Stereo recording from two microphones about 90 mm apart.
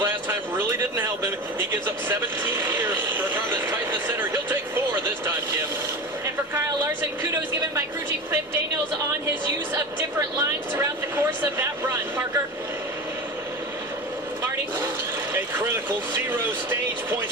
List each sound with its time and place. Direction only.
0.0 s speech: 25° right (ahead or behind)
6.5 s a sound: 25° right (ahead or behind)
10.8 s speech: 25° right (ahead or behind)
15.3 s speech: 20° right (ahead or behind)